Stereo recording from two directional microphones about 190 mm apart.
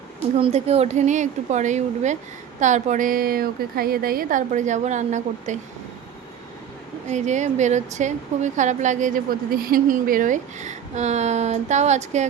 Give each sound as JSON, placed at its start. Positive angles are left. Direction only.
{"t": 0.3, "sound": "a woman's voice", "side_deg": -30}
{"t": 7.1, "sound": "speech", "side_deg": -40}